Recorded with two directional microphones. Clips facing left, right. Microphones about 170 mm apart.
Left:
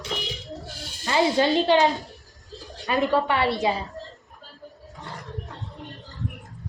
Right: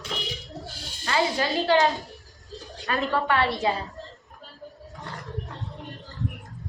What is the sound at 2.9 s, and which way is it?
Speech, 15° left (ahead or behind).